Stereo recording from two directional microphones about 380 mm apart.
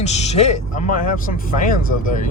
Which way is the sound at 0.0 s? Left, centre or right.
Centre.